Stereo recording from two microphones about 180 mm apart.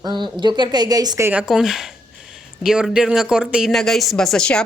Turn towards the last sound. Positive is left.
turn(degrees=5)  # may be behind; listen again after turning